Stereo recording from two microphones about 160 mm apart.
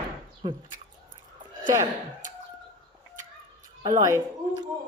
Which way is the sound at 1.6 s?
20° right (ahead or behind).